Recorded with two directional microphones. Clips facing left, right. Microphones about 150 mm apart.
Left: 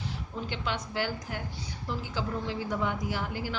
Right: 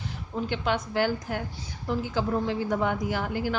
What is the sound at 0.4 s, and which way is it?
A woman's voice, 50° right (ahead or behind).